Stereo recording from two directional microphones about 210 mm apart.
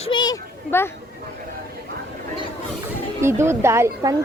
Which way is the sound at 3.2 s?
10° right (ahead or behind).